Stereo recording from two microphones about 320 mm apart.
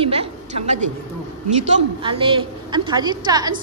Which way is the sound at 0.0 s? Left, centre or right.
Centre.